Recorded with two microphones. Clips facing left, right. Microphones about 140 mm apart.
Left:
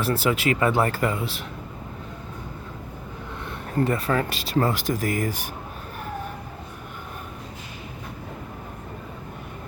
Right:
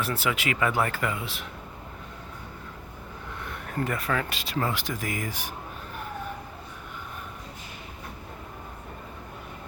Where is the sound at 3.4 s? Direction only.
30° left (ahead or behind); by 5.5 s 45° left (ahead or behind).